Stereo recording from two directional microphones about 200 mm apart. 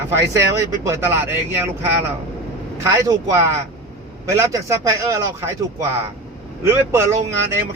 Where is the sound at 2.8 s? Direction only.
15° right (ahead or behind).